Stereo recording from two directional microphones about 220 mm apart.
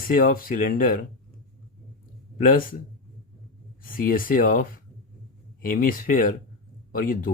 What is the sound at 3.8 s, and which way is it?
Speech, 40° left (ahead or behind).